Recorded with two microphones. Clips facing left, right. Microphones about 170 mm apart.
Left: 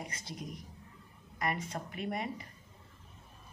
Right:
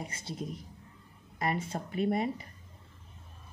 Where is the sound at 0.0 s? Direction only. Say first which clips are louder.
Right 4 dB; 25° right (ahead or behind).